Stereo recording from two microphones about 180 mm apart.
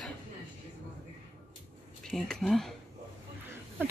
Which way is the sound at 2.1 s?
Centre (ahead or behind).